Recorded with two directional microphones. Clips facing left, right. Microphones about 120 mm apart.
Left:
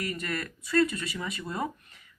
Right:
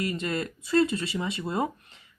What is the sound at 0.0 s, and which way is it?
Speech, 25° right (ahead or behind).